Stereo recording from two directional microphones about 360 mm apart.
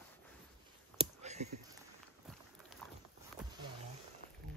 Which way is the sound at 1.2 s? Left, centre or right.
Centre.